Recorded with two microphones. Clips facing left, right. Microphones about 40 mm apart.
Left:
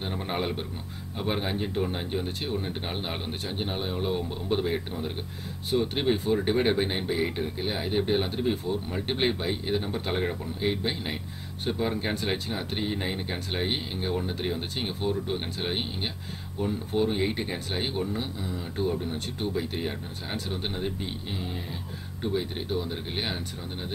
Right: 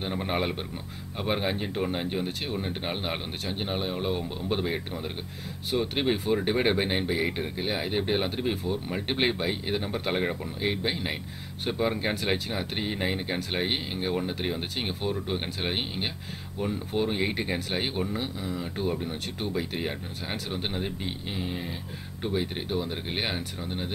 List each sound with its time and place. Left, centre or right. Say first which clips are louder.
0.0 s a man's voice: right 2 dB; centre